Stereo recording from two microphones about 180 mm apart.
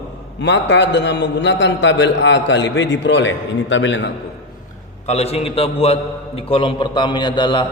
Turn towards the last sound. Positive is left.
turn(degrees=25)  # may be behind; listen again after turning